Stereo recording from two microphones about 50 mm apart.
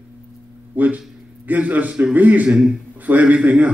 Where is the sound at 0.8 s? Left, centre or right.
Right.